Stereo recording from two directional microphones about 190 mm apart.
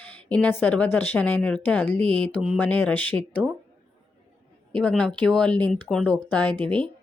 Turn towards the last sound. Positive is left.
turn(degrees=5)  # may be behind; listen again after turning